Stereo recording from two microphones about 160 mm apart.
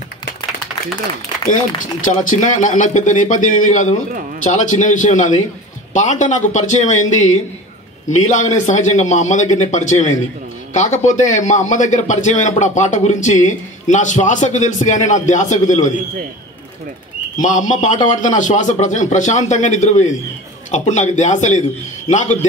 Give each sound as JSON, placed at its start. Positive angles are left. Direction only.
{"t": 1.5, "sound": "a man's voice", "side_deg": 55}
{"t": 17.4, "sound": "a man's voice", "side_deg": 50}